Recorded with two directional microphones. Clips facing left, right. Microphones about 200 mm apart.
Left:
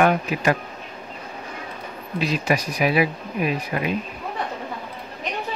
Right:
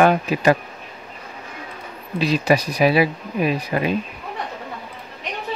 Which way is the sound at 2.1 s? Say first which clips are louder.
Right 4 dB; 35° right (ahead or behind).